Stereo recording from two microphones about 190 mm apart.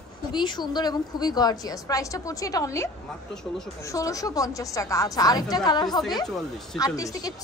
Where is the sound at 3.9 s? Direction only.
15° left (ahead or behind).